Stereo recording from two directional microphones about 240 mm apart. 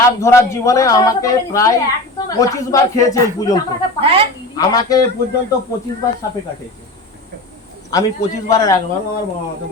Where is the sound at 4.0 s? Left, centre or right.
Right.